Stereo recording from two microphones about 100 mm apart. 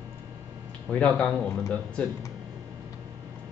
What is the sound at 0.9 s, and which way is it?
Speech, 10° left (ahead or behind).